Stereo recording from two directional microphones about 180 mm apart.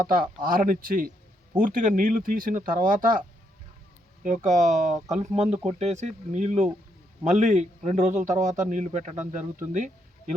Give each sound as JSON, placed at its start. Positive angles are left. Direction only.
{"t": 0.0, "sound": "speech", "side_deg": -50}